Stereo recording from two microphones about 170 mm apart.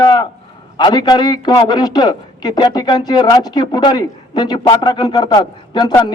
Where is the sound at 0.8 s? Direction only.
25° left (ahead or behind).